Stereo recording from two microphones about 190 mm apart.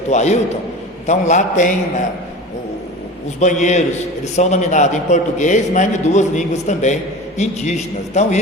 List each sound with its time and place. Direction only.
0.1 s a man's voice: 35° left (ahead or behind)
3.4 s a man's voice: 40° left (ahead or behind)